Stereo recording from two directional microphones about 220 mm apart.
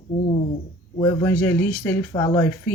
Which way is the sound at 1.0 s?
10° left (ahead or behind).